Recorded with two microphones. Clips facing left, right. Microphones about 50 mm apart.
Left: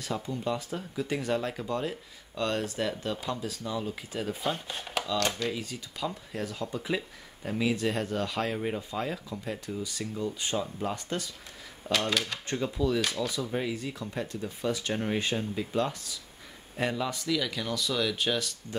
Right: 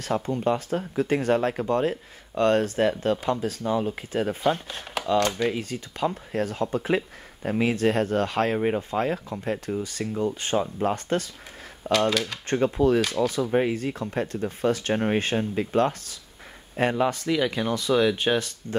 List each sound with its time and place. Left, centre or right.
0.0 s speech: right
4.6 s speech: centre
5.0 s speech: right
5.5 s speech: right
12.1 s speech: centre
12.4 s speech: right